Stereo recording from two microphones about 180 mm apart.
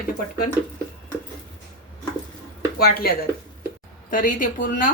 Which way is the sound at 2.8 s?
55° left (ahead or behind).